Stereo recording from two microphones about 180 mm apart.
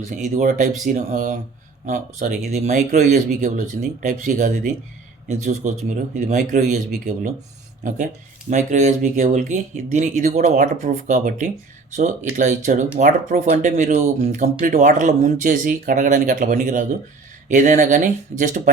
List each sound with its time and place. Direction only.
0.2 s speech: 45° right (ahead or behind)
8.4 s speech: 40° right (ahead or behind)